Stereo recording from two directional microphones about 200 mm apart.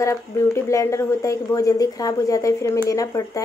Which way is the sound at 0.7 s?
15° left (ahead or behind).